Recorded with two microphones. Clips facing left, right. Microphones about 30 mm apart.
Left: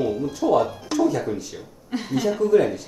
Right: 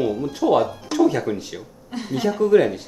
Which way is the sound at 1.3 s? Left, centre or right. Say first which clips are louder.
Right 2 dB; right.